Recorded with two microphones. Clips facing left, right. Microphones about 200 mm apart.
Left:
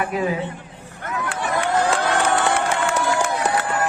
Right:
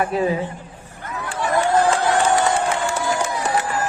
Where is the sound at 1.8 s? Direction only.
60° left (ahead or behind).